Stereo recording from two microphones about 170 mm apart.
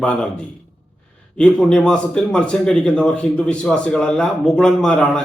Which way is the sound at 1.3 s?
5° left (ahead or behind).